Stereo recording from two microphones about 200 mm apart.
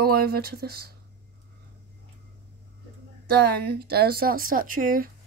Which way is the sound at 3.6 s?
50° right (ahead or behind).